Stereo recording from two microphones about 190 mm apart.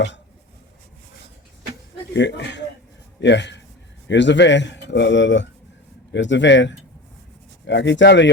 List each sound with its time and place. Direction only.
2.1 s a man's voice: 65° left (ahead or behind)